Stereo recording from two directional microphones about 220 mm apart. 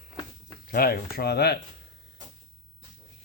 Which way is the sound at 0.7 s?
45° left (ahead or behind).